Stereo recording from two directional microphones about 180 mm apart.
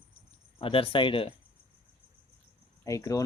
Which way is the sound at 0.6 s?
30° left (ahead or behind).